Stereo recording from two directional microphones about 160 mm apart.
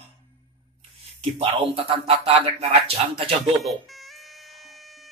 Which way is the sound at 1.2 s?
40° right (ahead or behind).